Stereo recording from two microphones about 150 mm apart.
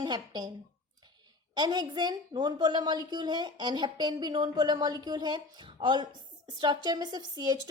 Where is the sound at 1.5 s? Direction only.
25° right (ahead or behind).